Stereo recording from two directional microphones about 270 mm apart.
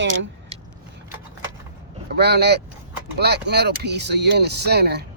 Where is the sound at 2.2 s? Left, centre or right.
Right.